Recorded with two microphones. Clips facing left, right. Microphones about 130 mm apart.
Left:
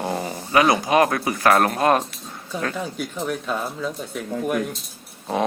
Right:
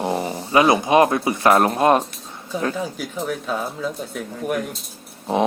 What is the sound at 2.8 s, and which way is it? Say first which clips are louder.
Speech: right 1 dB; 5° right (ahead or behind).